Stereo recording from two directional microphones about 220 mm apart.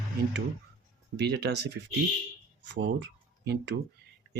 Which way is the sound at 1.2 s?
50° right (ahead or behind).